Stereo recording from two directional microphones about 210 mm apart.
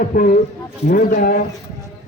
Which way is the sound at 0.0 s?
40° left (ahead or behind).